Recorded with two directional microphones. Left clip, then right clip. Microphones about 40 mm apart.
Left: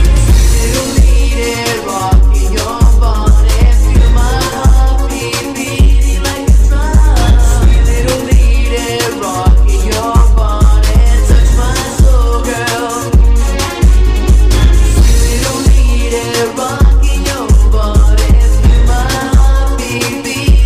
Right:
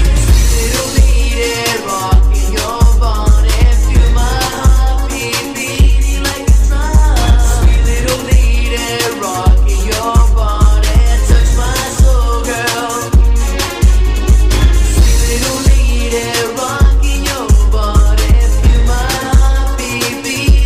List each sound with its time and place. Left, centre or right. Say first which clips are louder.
8.0 s music: left 2 dB; right
13.6 s music: left 1 dB; right
16.1 s music: left 1 dB; right